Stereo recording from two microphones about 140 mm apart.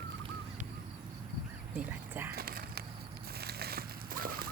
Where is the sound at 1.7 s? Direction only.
15° right (ahead or behind).